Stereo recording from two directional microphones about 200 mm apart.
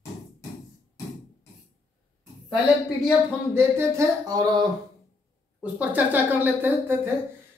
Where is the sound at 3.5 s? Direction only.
15° right (ahead or behind).